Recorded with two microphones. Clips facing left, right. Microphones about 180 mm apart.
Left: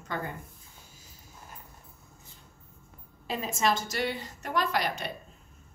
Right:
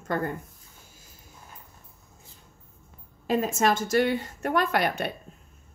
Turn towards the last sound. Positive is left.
turn(degrees=-55)  # may be behind; listen again after turning